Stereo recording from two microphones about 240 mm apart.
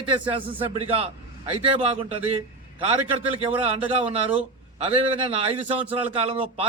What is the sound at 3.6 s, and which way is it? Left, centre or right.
A man's voice, right.